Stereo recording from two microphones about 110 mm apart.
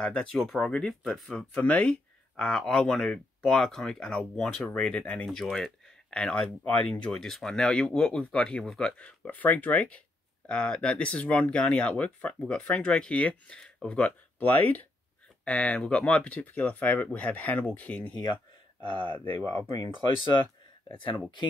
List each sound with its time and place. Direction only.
0.0 s speech: 10° left (ahead or behind)
19.4 s speech: 35° left (ahead or behind)